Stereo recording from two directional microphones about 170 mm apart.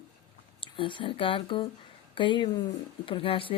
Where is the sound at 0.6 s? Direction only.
30° left (ahead or behind).